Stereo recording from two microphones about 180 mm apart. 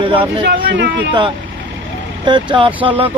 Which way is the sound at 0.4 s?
75° right (ahead or behind).